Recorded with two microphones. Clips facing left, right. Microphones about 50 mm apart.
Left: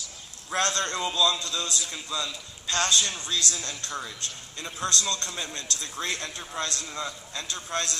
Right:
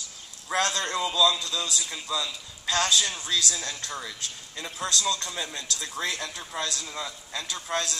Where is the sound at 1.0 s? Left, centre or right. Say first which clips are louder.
Right 3 dB; left.